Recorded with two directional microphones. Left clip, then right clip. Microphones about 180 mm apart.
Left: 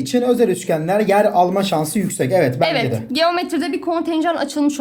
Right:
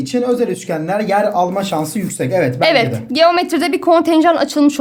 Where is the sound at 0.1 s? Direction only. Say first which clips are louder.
Left 1 dB; 20° left (ahead or behind).